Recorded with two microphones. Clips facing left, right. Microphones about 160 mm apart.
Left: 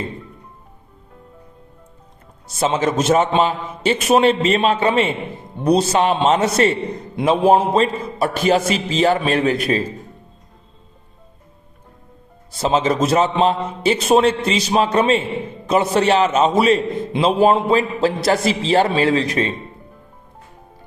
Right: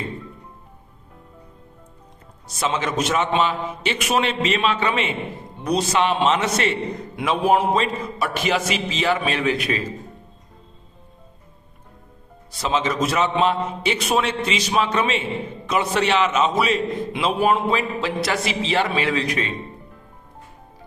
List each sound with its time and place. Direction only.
2.6 s a man's voice: 30° left (ahead or behind)
12.5 s a man's voice: 35° left (ahead or behind)